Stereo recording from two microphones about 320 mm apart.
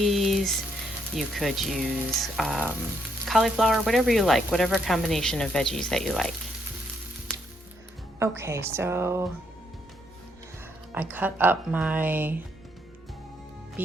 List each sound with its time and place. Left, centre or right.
0.0 s a sound: centre
1.1 s speech: centre
8.2 s a woman's voice: centre
10.9 s speech: centre
13.8 s speech: centre